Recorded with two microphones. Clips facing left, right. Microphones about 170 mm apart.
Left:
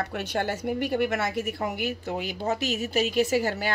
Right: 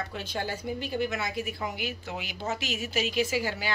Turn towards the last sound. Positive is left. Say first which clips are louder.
# left 5 dB
turn(degrees=50)  # may be behind; listen again after turning